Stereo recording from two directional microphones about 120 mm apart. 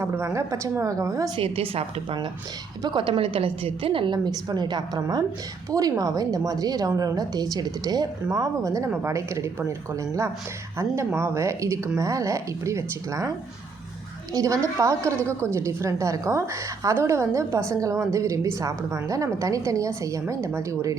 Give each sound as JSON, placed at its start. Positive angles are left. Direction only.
{"t": 0.0, "sound": "a woman's voice", "side_deg": -20}
{"t": 1.4, "sound": "a woman's voice", "side_deg": -50}
{"t": 2.8, "sound": "a woman's voice", "side_deg": -40}
{"t": 14.3, "sound": "a woman's voice", "side_deg": -25}